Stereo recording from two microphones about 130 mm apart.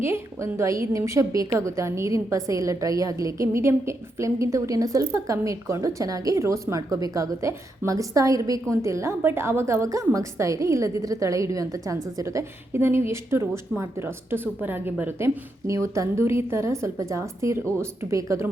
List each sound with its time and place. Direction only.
0.0 s a woman's voice: 20° right (ahead or behind)